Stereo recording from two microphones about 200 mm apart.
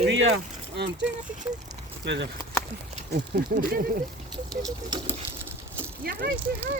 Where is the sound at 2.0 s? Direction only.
60° right (ahead or behind).